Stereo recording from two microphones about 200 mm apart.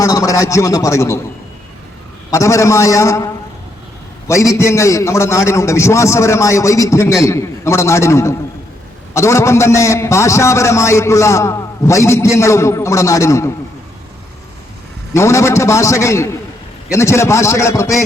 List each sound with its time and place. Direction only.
0.0 s a man's voice: 15° left (ahead or behind)
2.3 s a man's voice: 15° left (ahead or behind)
4.3 s a man's voice: 15° left (ahead or behind)
15.1 s a man's voice: 15° left (ahead or behind)